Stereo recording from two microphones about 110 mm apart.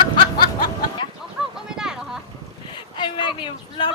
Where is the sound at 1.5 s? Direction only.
5° right (ahead or behind).